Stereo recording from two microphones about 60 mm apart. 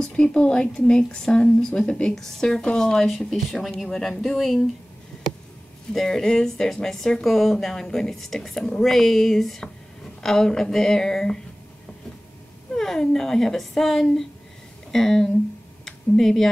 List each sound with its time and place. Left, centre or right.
0.0 s speech: centre
5.9 s speech: centre
12.7 s speech: centre
15.8 s a sound: centre